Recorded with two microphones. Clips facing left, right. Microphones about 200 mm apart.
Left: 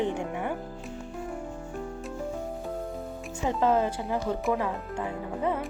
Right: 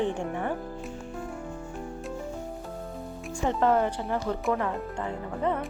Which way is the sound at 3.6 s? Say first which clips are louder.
Even; 15° left (ahead or behind).